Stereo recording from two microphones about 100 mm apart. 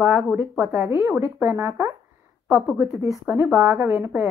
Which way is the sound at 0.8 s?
30° right (ahead or behind).